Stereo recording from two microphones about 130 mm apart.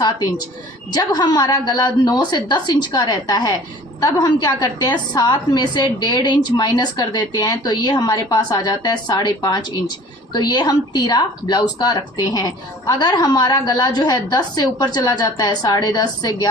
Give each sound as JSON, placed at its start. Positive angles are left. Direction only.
{"t": 0.0, "sound": "speech", "side_deg": 30}